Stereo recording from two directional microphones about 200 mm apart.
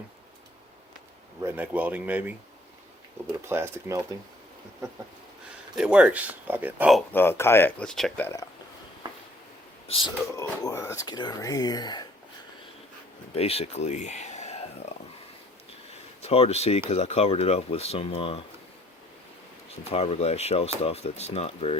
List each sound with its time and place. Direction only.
1.4 s speech: 10° right (ahead or behind)
3.5 s speech: 15° right (ahead or behind)
5.7 s speech: 5° right (ahead or behind)
7.1 s speech: 10° left (ahead or behind)
9.0 s a sound: 20° right (ahead or behind)
9.8 s speech: 30° left (ahead or behind)
10.3 s speech: 15° left (ahead or behind)
13.3 s speech: 30° left (ahead or behind)
16.2 s speech: 30° left (ahead or behind)
19.8 s speech: 30° left (ahead or behind)